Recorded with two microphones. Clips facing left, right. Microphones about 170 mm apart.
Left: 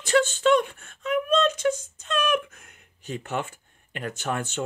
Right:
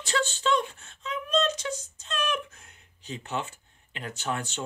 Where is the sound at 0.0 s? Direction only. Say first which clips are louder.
Left 7 dB; 50° left (ahead or behind).